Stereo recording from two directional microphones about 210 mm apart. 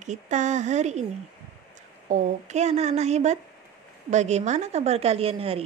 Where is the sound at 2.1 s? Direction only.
35° right (ahead or behind).